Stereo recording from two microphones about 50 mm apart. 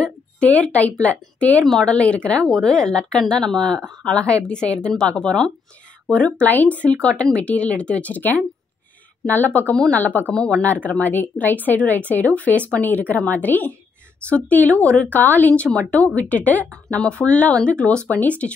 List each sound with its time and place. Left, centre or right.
0.0 s speech: left
10.3 s speech: centre
10.6 s speech: left